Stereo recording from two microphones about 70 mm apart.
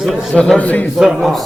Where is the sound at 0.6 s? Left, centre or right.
Left.